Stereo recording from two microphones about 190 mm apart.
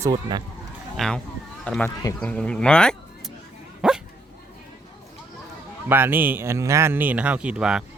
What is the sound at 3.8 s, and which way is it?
Dog, 5° right (ahead or behind).